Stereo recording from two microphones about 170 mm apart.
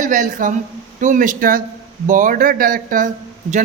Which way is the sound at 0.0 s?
50° right (ahead or behind).